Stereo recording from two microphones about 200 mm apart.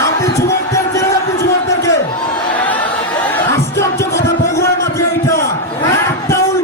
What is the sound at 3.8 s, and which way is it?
Music, 15° left (ahead or behind).